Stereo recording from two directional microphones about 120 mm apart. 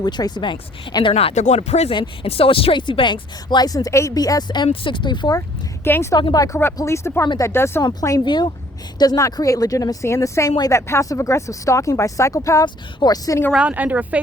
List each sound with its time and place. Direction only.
0.0 s speech: 35° left (ahead or behind)
1.1 s speech: 65° left (ahead or behind)
1.9 s speech: 50° left (ahead or behind)
5.8 s speech: 20° left (ahead or behind)
6.1 s speech: 35° left (ahead or behind)
8.2 s speech: 40° left (ahead or behind)
9.0 s speech: 30° left (ahead or behind)
13.5 s speech: 10° right (ahead or behind)